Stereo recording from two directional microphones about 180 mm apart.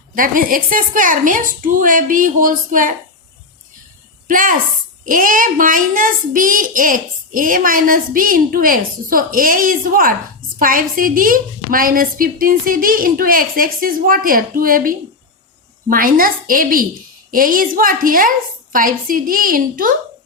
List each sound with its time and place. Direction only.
0.2 s a woman's voice: 50° right (ahead or behind)
4.3 s a woman's voice: 50° right (ahead or behind)